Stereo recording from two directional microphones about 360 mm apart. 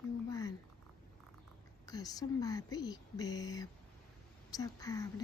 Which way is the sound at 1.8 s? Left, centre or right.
Centre.